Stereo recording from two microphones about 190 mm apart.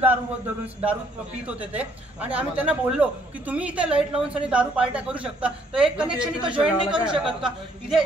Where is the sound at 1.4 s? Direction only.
5° right (ahead or behind).